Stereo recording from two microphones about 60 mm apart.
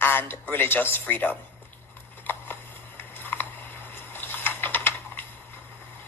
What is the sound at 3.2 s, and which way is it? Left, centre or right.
Biting, left.